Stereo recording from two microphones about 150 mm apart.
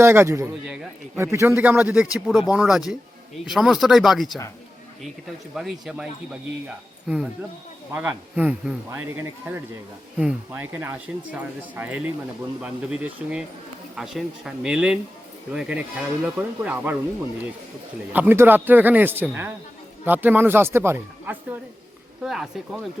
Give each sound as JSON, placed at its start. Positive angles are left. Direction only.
{"t": 0.0, "sound": "a man's voice", "side_deg": -15}
{"t": 5.5, "sound": "speech", "side_deg": -5}
{"t": 7.9, "sound": "a man's voice", "side_deg": -10}
{"t": 18.1, "sound": "a man's voice", "side_deg": -10}
{"t": 22.2, "sound": "speech", "side_deg": 0}